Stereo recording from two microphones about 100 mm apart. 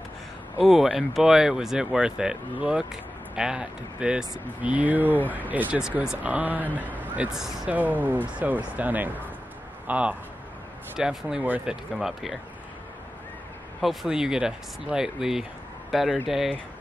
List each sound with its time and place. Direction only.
0.6 s speech: centre (ahead or behind)
7.3 s speech: 5° right (ahead or behind)
7.7 s speech: 15° right (ahead or behind); by 12.4 s centre (ahead or behind)
13.7 s speech: 5° right (ahead or behind)